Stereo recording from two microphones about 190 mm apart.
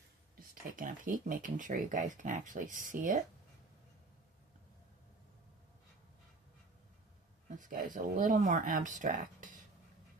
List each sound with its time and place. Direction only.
0.3 s speech: 45° right (ahead or behind)
7.6 s speech: 45° right (ahead or behind)